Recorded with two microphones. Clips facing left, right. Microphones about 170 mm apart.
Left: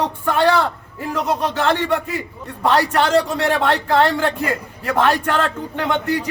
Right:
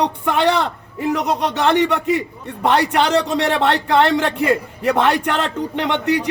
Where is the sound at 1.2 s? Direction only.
70° right (ahead or behind).